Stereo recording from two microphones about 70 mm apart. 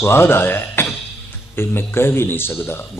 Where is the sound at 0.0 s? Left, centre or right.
Left.